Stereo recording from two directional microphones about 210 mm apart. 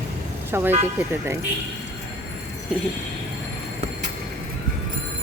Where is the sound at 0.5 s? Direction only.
10° right (ahead or behind).